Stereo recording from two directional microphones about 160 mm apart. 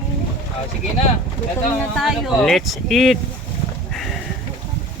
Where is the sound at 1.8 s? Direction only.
Centre (ahead or behind).